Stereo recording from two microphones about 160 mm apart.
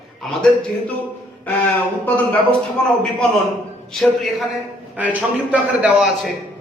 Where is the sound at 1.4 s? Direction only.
10° left (ahead or behind).